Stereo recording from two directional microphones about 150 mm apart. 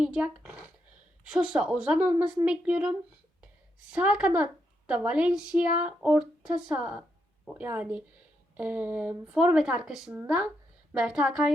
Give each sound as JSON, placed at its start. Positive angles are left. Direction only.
{"t": 0.0, "sound": "speech", "side_deg": -5}
{"t": 3.9, "sound": "a woman's voice", "side_deg": -10}